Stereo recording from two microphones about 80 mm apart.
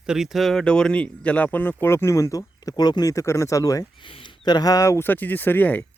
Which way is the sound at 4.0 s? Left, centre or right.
Left.